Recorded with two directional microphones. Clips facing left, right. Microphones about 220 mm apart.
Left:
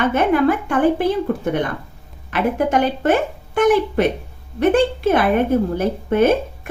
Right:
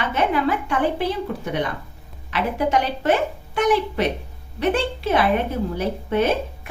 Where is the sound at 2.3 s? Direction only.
50° left (ahead or behind).